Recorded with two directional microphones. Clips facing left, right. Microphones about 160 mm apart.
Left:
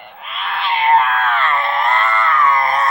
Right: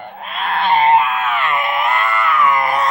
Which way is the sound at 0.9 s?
10° right (ahead or behind).